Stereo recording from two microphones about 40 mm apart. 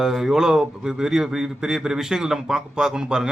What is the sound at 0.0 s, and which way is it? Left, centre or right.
A man's voice, centre.